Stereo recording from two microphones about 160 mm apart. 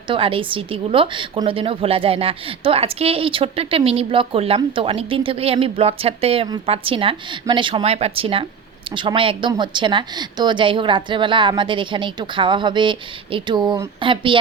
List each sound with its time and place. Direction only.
0.1 s a woman's voice: 35° right (ahead or behind)